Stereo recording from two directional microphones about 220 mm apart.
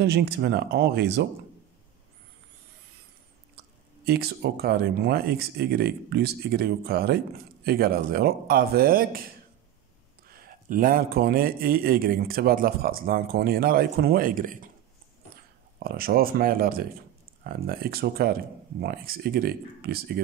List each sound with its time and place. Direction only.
0.0 s speech: 50° right (ahead or behind)
4.0 s a man's voice: 45° right (ahead or behind)
15.8 s speech: 45° right (ahead or behind)